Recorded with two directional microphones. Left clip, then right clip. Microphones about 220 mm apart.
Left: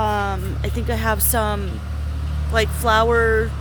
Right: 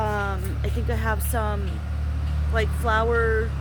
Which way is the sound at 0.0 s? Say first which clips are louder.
Left 5 dB; 40° left (ahead or behind).